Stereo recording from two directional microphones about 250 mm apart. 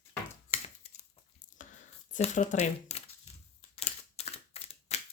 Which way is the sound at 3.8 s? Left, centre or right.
Left.